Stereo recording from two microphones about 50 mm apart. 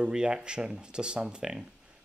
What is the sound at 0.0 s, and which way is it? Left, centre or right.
Speech, centre.